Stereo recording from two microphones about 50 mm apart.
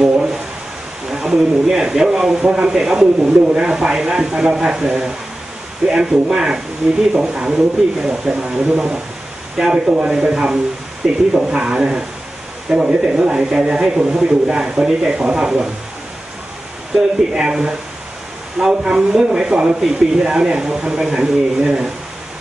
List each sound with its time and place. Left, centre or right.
0.0 s a sound: centre
1.1 s speech: centre
3.2 s speech: right
16.9 s speech: centre